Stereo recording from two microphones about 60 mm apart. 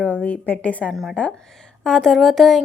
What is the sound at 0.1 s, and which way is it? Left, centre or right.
A woman's voice, left.